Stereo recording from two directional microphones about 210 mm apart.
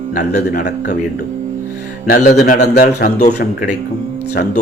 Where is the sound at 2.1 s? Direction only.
45° left (ahead or behind).